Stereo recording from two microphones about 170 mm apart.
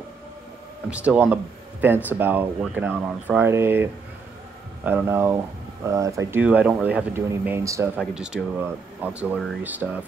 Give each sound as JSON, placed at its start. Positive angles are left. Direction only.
{"t": 0.8, "sound": "speech", "side_deg": -5}
{"t": 8.1, "sound": "speech", "side_deg": -5}